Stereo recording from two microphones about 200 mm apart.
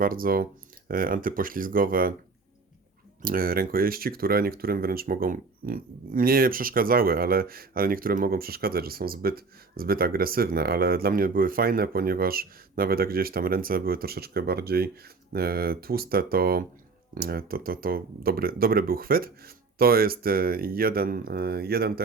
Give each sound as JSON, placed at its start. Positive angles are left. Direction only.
{"t": 0.0, "sound": "speech", "side_deg": -45}
{"t": 3.2, "sound": "speech", "side_deg": -45}